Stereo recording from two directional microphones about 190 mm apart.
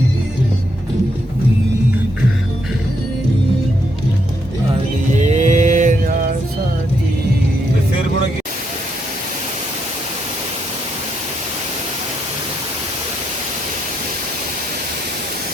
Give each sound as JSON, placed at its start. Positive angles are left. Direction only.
{"t": 5.1, "sound": "mantra", "side_deg": -35}